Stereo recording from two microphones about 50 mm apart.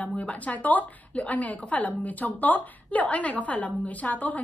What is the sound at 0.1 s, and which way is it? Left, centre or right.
A woman's voice, left.